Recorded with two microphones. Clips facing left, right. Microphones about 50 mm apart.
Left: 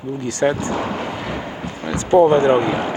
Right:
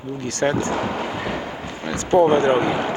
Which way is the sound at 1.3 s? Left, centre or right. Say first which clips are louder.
Left 1 dB; left.